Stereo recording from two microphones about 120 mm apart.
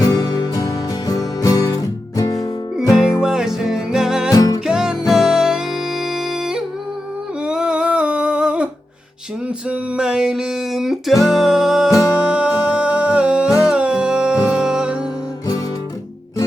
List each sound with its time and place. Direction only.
0.0 s music: 30° left (ahead or behind)
3.2 s music: 5° right (ahead or behind)
4.3 s music: 30° left (ahead or behind)
4.6 s music: 5° right (ahead or behind)
7.4 s humming: 5° right (ahead or behind)
9.6 s music: 5° right (ahead or behind)
11.9 s music: 25° left (ahead or behind)
12.3 s music: 10° right (ahead or behind)